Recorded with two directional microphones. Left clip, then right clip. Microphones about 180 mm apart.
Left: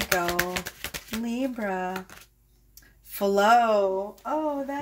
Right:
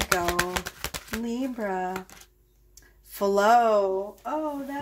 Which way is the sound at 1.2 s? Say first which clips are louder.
Left 1 dB; 20° left (ahead or behind).